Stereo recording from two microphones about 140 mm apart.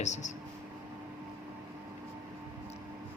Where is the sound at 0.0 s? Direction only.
55° left (ahead or behind).